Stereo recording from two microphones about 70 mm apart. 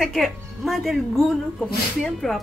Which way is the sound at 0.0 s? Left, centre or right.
Centre.